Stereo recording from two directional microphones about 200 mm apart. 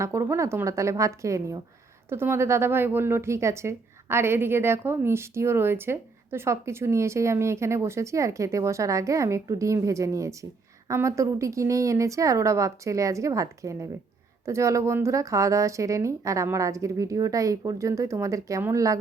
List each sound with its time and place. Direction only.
0.0 s speech: 15° right (ahead or behind)